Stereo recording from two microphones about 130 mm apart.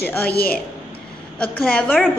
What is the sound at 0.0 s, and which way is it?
A woman's voice, 15° left (ahead or behind).